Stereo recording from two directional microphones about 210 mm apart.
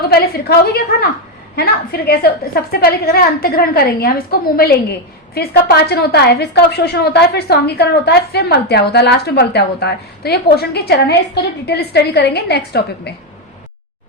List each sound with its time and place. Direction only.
0.1 s a woman's voice: 45° left (ahead or behind)